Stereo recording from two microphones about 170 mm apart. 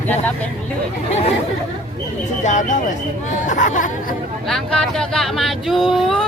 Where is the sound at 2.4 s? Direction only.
45° left (ahead or behind).